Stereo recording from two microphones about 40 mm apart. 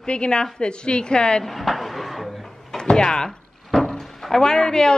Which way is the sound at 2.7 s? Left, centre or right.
Centre.